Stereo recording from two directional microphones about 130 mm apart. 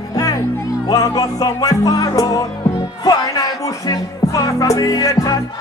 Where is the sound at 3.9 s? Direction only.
25° left (ahead or behind).